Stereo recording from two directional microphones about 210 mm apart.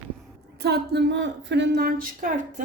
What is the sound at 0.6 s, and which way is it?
A woman's voice, 55° right (ahead or behind).